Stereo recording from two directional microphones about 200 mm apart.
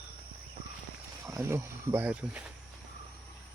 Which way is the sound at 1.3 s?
15° right (ahead or behind).